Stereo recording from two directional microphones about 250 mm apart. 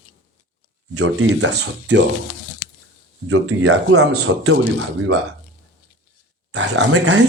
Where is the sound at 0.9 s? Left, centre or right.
Right.